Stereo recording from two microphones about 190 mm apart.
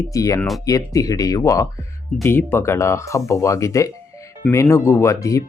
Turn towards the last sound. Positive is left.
turn(degrees=15)  # may be behind; listen again after turning